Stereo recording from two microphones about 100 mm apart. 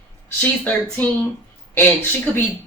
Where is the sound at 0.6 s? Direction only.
15° left (ahead or behind).